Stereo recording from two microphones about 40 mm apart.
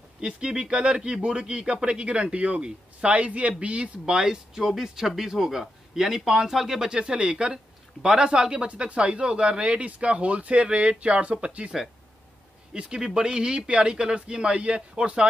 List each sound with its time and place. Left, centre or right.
0.2 s a man's voice: right
4.0 s speech: centre
6.9 s speech: centre
12.7 s speech: right